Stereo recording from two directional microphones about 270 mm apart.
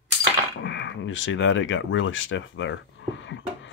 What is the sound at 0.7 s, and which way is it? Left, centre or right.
Speech, left.